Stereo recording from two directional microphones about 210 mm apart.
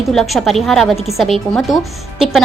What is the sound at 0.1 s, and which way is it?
A woman's voice, centre (ahead or behind).